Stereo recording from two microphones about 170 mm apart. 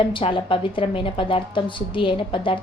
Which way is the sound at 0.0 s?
30° left (ahead or behind).